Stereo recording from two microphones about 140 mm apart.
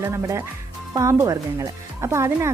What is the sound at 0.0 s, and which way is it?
Speech, 20° right (ahead or behind).